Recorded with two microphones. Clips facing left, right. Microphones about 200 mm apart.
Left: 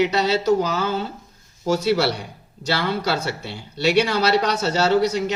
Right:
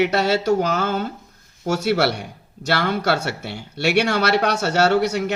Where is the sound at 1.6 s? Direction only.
60° right (ahead or behind).